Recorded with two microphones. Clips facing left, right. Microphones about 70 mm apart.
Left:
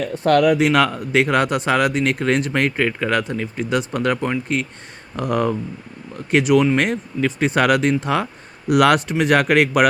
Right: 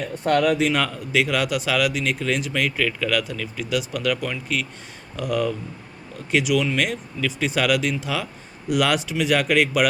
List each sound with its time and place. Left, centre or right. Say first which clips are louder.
0.2 s speech: left 4 dB; left
0.9 s speech: left 4 dB; left
8.7 s speech: left 6 dB; left